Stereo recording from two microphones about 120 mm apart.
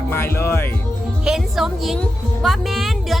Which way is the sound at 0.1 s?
20° left (ahead or behind).